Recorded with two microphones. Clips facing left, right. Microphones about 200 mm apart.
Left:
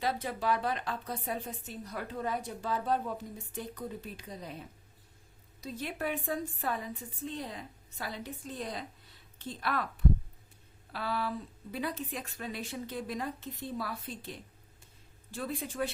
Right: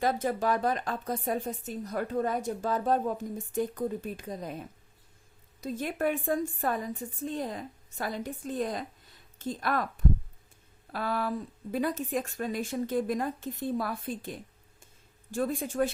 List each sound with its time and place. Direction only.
0.0 s a woman's voice: 45° right (ahead or behind)
5.5 s a woman's voice: 50° right (ahead or behind)